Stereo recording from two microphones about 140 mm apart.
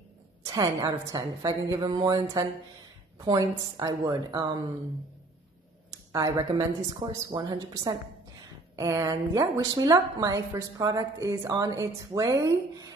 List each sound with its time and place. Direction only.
0.4 s a woman's voice: 25° right (ahead or behind)
6.1 s a woman's voice: 25° right (ahead or behind)